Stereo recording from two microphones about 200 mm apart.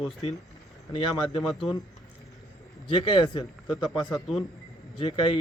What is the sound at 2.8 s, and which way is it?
Speech, 25° left (ahead or behind).